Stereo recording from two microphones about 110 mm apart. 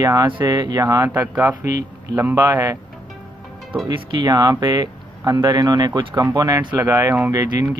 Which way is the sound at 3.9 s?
45° right (ahead or behind).